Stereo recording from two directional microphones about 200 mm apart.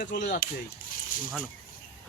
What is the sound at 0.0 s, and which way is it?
Speech, 55° left (ahead or behind).